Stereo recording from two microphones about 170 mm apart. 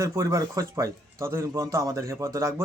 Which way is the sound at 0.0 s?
20° right (ahead or behind).